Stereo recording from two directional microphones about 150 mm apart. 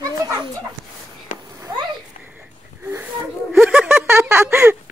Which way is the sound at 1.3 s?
60° left (ahead or behind).